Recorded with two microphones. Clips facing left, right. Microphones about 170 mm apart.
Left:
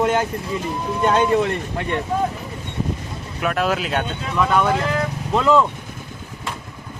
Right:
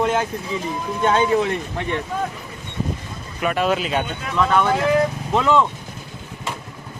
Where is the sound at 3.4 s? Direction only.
Centre (ahead or behind).